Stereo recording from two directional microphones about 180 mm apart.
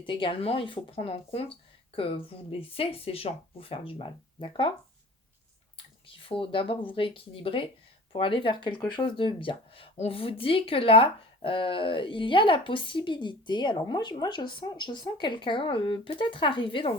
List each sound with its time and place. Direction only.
0.0 s speech: 30° left (ahead or behind)
5.7 s speech: 30° left (ahead or behind)